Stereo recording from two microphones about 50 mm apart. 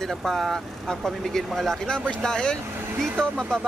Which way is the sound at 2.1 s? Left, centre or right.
Centre.